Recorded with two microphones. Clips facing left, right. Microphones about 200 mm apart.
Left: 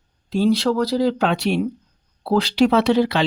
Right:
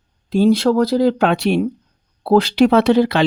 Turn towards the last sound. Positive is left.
turn(degrees=-55)  # may be behind; listen again after turning